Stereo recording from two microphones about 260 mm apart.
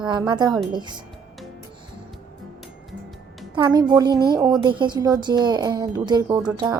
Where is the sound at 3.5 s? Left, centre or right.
Centre.